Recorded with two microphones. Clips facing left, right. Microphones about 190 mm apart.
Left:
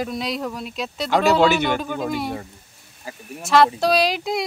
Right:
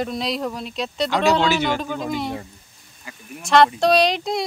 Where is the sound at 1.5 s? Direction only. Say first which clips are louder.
Left 1 dB; 55° left (ahead or behind).